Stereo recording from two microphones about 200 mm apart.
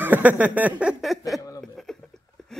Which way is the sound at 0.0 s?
10° right (ahead or behind).